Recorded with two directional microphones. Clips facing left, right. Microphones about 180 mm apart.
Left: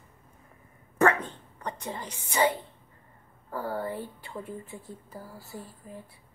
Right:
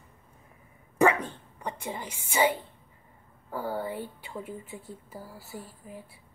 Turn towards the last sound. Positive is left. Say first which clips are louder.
# even
turn(degrees=-10)  # may be behind; listen again after turning